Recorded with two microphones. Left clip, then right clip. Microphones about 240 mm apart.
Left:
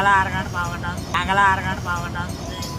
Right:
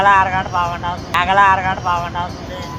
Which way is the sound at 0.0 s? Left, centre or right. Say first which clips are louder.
Right 5 dB; left.